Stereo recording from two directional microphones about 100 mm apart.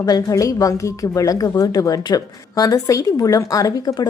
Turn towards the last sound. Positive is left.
turn(degrees=35)  # may be behind; listen again after turning